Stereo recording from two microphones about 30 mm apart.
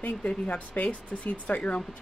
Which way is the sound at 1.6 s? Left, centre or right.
Left.